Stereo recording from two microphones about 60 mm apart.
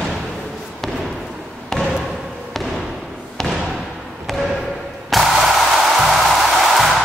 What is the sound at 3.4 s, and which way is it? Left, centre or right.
Basketball bounce, centre.